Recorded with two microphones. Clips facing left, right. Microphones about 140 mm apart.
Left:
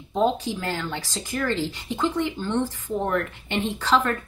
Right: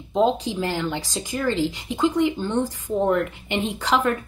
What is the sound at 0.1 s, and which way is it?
Speech, 20° right (ahead or behind).